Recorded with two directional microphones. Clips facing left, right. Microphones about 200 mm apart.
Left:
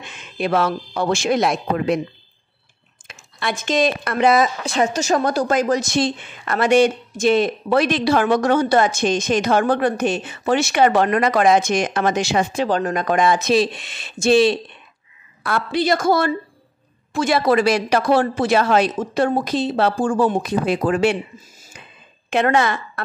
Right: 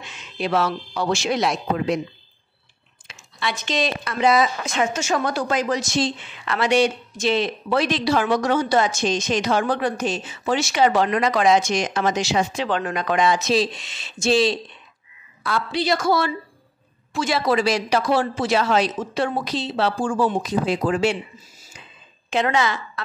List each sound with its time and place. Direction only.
0.0 s speech: 55° left (ahead or behind)
3.1 s speech: 50° left (ahead or behind)
4.6 s a woman's voice: 35° left (ahead or behind); by 12.6 s 55° left (ahead or behind)
12.6 s a woman's voice: 40° left (ahead or behind); by 21.2 s 60° left (ahead or behind)
22.3 s a woman's voice: 55° left (ahead or behind)